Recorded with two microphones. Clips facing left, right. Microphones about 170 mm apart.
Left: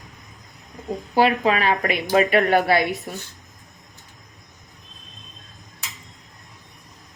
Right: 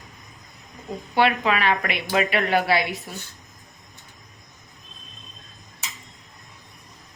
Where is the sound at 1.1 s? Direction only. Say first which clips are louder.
Left 2 dB; 35° left (ahead or behind).